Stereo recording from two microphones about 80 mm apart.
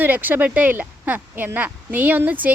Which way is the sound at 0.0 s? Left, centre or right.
Right.